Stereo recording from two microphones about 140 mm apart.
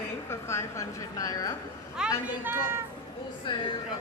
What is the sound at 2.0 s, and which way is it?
Speech, 10° right (ahead or behind).